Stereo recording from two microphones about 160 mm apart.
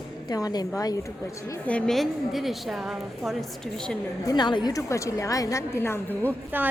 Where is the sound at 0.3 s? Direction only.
25° left (ahead or behind).